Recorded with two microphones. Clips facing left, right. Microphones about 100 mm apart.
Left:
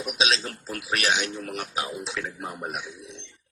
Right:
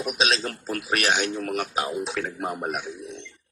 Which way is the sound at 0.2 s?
50° right (ahead or behind).